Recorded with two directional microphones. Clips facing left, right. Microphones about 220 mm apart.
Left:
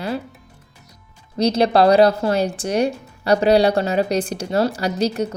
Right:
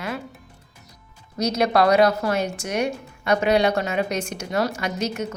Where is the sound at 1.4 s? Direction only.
30° left (ahead or behind).